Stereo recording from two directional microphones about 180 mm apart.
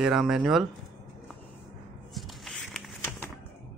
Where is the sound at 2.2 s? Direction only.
Centre (ahead or behind).